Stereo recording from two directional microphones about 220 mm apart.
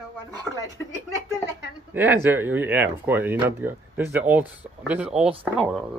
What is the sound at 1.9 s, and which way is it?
Speech, 10° right (ahead or behind).